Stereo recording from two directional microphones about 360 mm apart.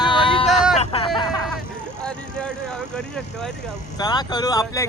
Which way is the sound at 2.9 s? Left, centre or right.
Centre.